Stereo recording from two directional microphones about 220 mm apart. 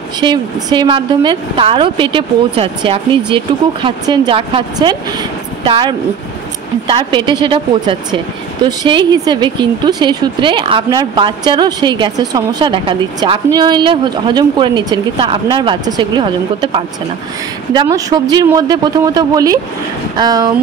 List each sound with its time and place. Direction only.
0.2 s speech: 20° right (ahead or behind)